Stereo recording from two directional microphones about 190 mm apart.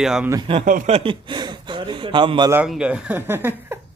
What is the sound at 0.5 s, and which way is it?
Speech, 40° right (ahead or behind).